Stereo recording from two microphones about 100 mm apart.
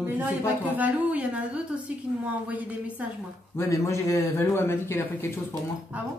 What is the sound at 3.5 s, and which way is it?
Speech, 30° left (ahead or behind).